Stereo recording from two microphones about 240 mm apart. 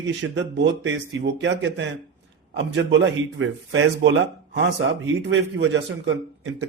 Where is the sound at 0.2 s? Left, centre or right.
Right.